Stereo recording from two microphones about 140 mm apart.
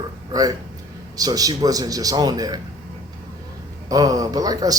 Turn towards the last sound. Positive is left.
turn(degrees=-25)  # may be behind; listen again after turning